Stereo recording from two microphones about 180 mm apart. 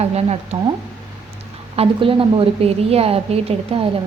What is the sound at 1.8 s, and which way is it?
A woman's voice, 30° right (ahead or behind).